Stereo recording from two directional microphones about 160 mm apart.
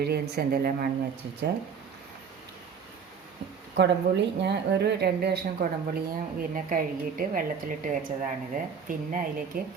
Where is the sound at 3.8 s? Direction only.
90° right.